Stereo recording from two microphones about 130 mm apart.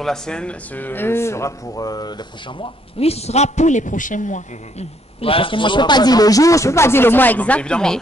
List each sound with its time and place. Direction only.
0.0 s speech: 5° left (ahead or behind); by 4.8 s 70° left (ahead or behind)
5.2 s a man's voice: 45° left (ahead or behind); by 8.0 s 5° left (ahead or behind)